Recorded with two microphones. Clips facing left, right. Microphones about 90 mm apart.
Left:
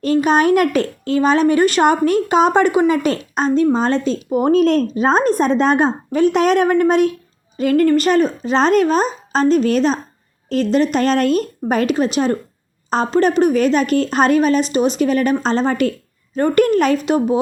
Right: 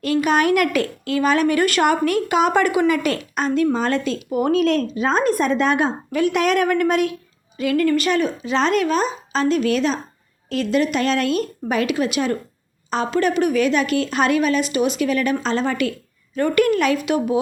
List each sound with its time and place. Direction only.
0.0 s a woman's voice: 30° left (ahead or behind)